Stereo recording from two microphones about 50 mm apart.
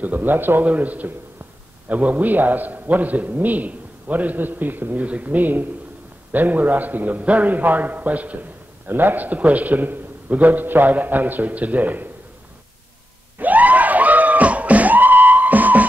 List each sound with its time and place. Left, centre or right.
0.0 s a man's voice: right
0.7 s a man's voice: right
13.4 s a sound: right